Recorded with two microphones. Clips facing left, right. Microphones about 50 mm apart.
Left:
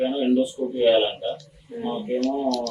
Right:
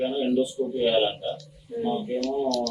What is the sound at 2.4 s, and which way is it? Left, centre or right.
Speech, left.